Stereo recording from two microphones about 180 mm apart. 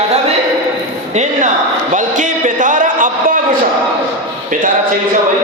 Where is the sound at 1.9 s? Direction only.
45° right (ahead or behind).